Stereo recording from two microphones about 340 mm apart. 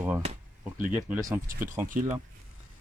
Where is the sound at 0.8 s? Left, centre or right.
Centre.